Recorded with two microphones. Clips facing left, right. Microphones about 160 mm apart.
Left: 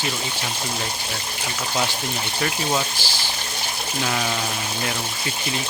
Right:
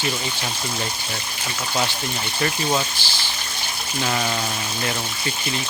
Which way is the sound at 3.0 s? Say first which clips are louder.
Left 2 dB; 10° left (ahead or behind).